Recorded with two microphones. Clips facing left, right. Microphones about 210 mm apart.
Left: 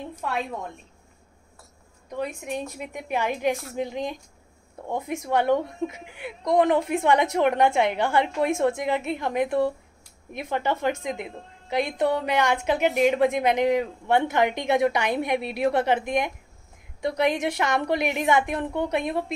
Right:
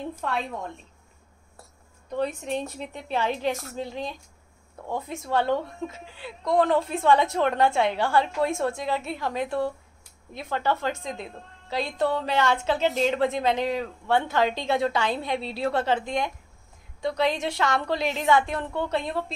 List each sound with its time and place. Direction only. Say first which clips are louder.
2.1 s a woman's voice: right 2 dB; 10° left (ahead or behind)